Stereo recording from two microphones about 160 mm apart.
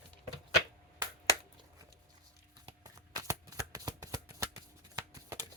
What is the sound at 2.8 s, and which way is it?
Shuffling cards, 20° right (ahead or behind).